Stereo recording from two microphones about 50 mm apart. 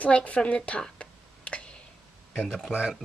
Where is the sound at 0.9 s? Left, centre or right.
Left.